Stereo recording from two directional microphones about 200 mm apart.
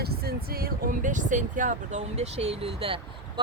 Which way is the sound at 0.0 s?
50° right (ahead or behind).